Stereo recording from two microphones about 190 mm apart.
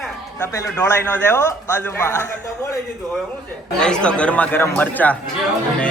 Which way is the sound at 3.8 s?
5° left (ahead or behind).